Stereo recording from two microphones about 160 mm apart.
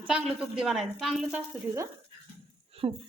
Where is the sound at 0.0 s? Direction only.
5° right (ahead or behind).